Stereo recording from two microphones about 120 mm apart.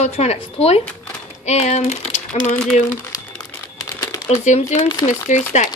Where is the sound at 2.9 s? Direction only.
20° left (ahead or behind).